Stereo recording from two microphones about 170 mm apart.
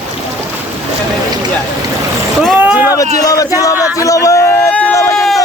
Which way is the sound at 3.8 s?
20° left (ahead or behind).